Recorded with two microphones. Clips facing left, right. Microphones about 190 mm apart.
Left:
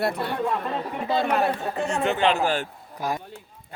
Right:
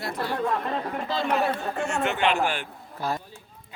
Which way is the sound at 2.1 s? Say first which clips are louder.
Left 3 dB; 35° left (ahead or behind).